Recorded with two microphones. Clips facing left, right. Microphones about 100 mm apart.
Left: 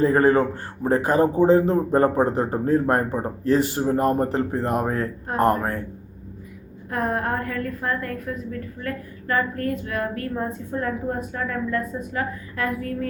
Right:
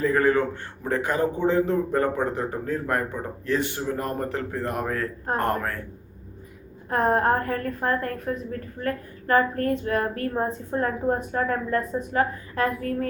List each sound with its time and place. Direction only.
0.0 s speech: 35° left (ahead or behind)
6.9 s a woman's voice: 40° right (ahead or behind)